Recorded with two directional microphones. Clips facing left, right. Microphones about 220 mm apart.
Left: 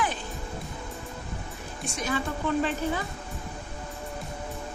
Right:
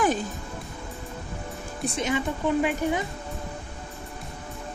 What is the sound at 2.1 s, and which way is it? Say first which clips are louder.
Speech: right 1 dB; 15° right (ahead or behind).